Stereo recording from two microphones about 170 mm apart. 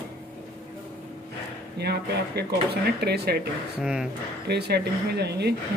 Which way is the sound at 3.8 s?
5° right (ahead or behind).